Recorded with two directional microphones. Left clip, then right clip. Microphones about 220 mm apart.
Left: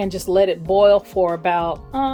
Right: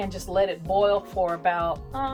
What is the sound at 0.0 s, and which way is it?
Speech, 50° left (ahead or behind).